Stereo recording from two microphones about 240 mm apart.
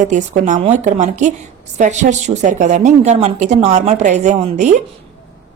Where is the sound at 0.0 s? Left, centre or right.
Right.